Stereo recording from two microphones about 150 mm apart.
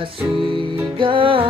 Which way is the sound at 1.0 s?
35° right (ahead or behind).